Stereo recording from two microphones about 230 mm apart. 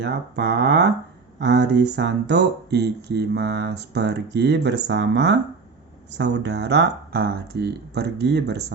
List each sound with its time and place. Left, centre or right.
0.0 s speech: right